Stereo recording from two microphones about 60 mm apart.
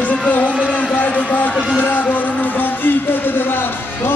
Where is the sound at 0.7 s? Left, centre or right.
Left.